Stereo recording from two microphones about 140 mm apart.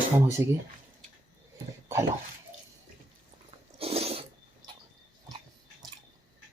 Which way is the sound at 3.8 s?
45° right (ahead or behind).